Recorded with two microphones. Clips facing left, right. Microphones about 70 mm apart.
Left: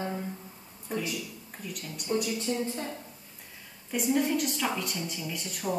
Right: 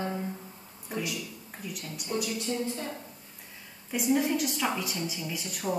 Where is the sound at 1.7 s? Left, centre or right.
Centre.